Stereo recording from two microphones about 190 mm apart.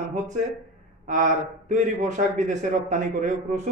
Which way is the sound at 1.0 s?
40° right (ahead or behind).